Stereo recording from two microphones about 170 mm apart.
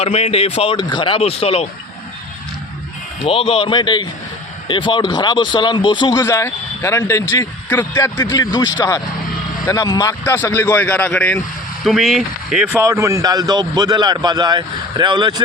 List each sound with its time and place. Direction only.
0.0 s speech: 40° left (ahead or behind)
3.2 s a man's voice: 35° left (ahead or behind); by 11.4 s 10° left (ahead or behind)
11.9 s speech: centre (ahead or behind)
12.7 s a man's voice: 15° right (ahead or behind)